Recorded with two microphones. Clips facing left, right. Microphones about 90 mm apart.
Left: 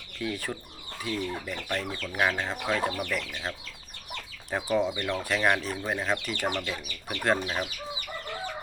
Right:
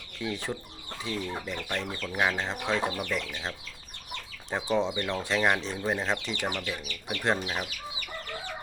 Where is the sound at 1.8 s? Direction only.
15° right (ahead or behind).